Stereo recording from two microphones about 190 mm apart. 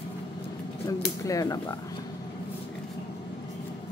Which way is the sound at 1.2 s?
20° left (ahead or behind).